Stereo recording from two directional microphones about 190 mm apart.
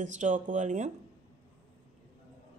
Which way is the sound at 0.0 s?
40° right (ahead or behind).